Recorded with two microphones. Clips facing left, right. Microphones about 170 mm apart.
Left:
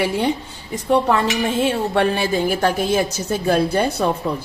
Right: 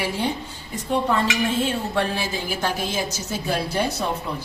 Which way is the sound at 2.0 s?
60° left (ahead or behind).